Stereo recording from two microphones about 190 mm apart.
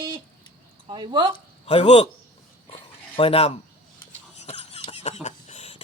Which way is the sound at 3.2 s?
30° left (ahead or behind).